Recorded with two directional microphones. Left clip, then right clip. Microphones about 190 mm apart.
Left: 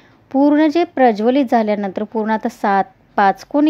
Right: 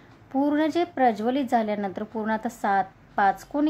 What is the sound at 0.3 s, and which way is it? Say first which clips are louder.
Speech: left 10 dB; 35° left (ahead or behind).